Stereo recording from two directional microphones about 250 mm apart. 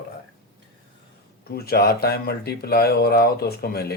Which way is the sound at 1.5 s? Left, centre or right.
Left.